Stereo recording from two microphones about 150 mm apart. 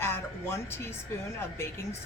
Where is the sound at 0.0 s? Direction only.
15° left (ahead or behind).